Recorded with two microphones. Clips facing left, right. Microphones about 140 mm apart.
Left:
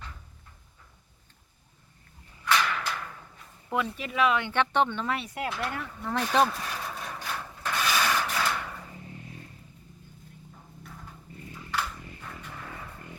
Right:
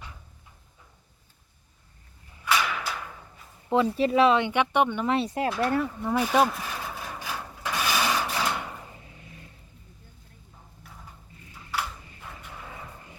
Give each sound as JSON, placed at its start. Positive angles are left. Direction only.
{"t": 2.4, "sound": "whip", "side_deg": -5}
{"t": 3.9, "sound": "speech", "side_deg": -30}
{"t": 4.4, "sound": "speech", "side_deg": -10}
{"t": 5.1, "sound": "speech", "side_deg": -30}
{"t": 5.5, "sound": "speech", "side_deg": 0}
{"t": 5.9, "sound": "a sound", "side_deg": -10}
{"t": 7.6, "sound": "sewing machine", "side_deg": -15}
{"t": 10.8, "sound": "a sound", "side_deg": -5}